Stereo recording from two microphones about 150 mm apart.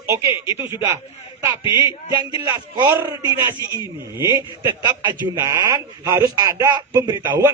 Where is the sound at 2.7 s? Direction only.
30° right (ahead or behind).